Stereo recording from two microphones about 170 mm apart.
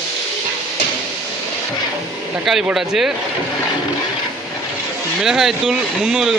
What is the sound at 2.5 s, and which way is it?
Speech, centre (ahead or behind).